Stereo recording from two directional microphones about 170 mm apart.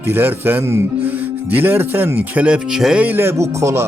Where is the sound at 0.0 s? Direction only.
10° right (ahead or behind).